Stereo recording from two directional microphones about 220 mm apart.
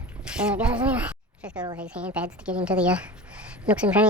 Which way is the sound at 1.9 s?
5° right (ahead or behind).